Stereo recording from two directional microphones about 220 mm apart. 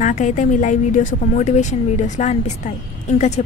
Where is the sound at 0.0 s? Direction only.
35° left (ahead or behind).